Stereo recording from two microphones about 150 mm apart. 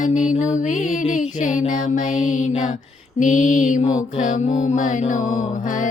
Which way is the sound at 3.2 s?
55° left (ahead or behind).